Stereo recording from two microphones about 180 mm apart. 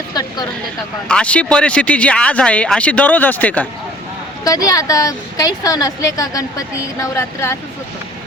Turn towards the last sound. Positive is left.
turn(degrees=15)  # may be behind; listen again after turning